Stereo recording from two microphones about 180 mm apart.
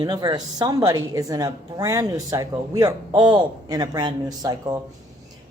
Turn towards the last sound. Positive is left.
turn(degrees=-20)  # may be behind; listen again after turning